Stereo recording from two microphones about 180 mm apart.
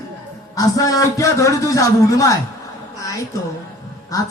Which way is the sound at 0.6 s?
20° left (ahead or behind).